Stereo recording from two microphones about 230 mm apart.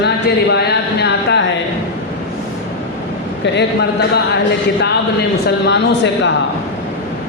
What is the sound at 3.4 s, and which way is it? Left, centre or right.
Speech, left.